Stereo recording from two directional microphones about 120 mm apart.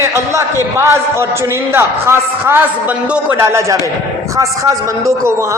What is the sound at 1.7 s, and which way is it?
A man's voice, 20° right (ahead or behind).